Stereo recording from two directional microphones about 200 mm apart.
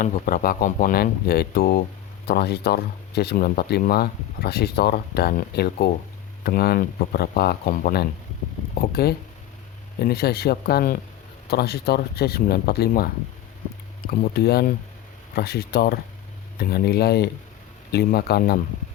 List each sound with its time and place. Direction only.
0.0 s speech: 45° left (ahead or behind)
14.1 s speech: 50° left (ahead or behind)